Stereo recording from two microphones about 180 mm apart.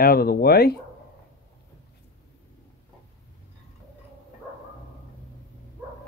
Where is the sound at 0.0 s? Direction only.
55° left (ahead or behind).